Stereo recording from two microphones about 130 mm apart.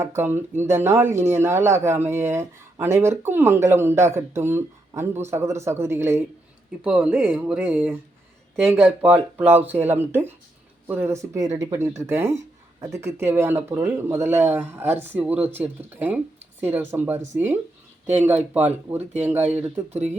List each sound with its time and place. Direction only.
0.0 s a man's voice: 20° right (ahead or behind)